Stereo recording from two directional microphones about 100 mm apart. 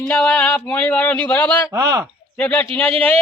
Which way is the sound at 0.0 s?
10° left (ahead or behind).